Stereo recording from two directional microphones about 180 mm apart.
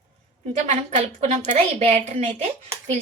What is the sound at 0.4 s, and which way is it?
A woman's voice, 40° right (ahead or behind).